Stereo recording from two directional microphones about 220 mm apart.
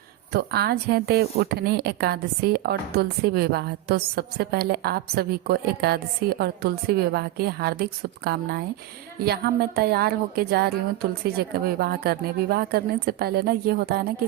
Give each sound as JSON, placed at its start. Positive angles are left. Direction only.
{"t": 0.3, "sound": "speech", "side_deg": -45}